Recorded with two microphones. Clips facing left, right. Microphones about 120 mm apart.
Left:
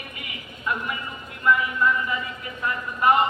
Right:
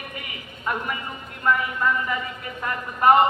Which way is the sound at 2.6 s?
45° right (ahead or behind).